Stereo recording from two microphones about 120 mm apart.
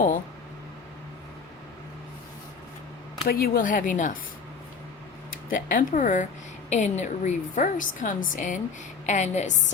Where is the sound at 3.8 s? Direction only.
90° left.